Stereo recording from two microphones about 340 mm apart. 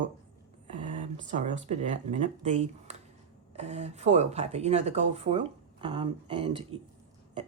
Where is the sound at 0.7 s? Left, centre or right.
Right.